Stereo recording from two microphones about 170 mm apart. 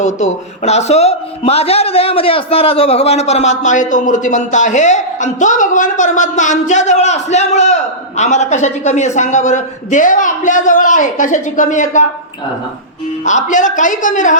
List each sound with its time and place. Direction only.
0.0 s a man's voice: 40° left (ahead or behind)
13.2 s a man's voice: 45° left (ahead or behind)